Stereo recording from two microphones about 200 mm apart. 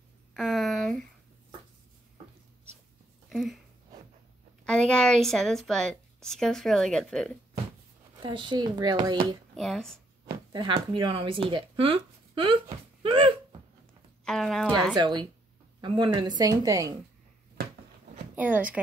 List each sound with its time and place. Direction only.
0.3 s a sound: centre (ahead or behind)
3.3 s a sound: centre (ahead or behind)
4.6 s a woman's voice: 5° left (ahead or behind)
8.2 s a woman's voice: 25° right (ahead or behind)
9.6 s a woman's voice: centre (ahead or behind)
10.2 s speech: 25° right (ahead or behind)
14.2 s a woman's voice: centre (ahead or behind)
15.8 s a woman's voice: 20° right (ahead or behind)
18.3 s speech: 10° right (ahead or behind)